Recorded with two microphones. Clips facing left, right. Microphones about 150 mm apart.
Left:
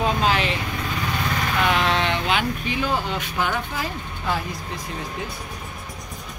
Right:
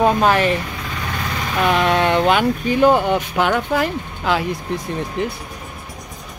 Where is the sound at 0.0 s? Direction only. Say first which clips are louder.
Right 7 dB; 50° right (ahead or behind).